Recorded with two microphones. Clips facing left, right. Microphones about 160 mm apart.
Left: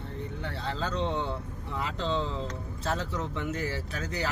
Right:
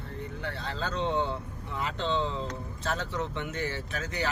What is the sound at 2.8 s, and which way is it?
Speech, 30° left (ahead or behind).